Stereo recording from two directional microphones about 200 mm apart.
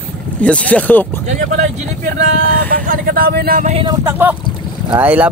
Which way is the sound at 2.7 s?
45° right (ahead or behind).